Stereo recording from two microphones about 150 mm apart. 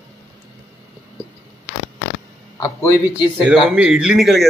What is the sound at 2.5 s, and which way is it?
Speech, 20° left (ahead or behind).